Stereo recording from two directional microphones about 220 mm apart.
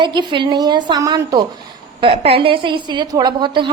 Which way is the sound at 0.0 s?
20° right (ahead or behind).